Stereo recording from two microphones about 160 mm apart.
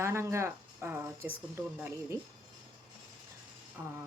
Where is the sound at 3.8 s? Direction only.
15° right (ahead or behind).